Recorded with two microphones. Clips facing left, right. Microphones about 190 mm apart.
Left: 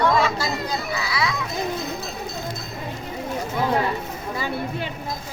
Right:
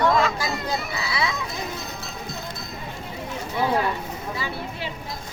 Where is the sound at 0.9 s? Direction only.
25° right (ahead or behind).